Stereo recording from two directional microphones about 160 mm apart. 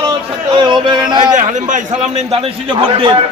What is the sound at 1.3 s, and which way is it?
A man's voice, 50° right (ahead or behind).